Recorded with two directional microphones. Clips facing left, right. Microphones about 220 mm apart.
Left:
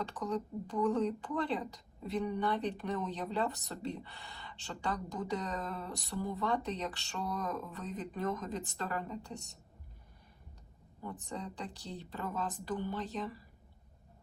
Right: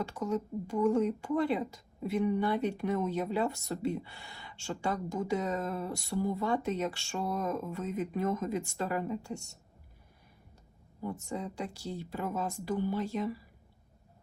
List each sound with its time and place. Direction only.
0.0 s speech: 10° right (ahead or behind)
11.3 s speech: 10° right (ahead or behind)